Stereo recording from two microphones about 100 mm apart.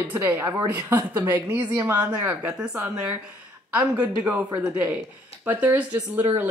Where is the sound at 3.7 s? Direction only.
15° right (ahead or behind).